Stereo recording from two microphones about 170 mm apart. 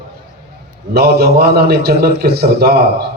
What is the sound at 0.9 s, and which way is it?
A man's voice, 70° right (ahead or behind).